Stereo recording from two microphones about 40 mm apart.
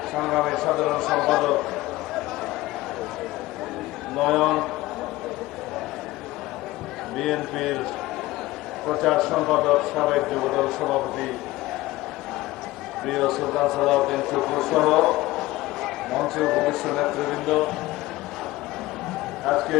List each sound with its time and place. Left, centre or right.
0.1 s a man's voice: centre
4.1 s a man's voice: centre
7.2 s a man's voice: centre
8.9 s a man's voice: centre
13.1 s a man's voice: centre
19.5 s speech: centre